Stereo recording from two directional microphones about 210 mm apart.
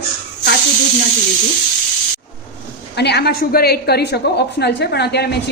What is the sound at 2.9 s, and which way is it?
A woman's voice, 55° left (ahead or behind).